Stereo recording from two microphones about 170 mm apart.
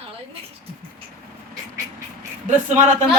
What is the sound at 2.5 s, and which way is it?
Speech, 50° right (ahead or behind).